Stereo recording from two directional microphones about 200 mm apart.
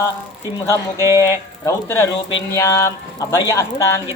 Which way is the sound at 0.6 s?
15° left (ahead or behind).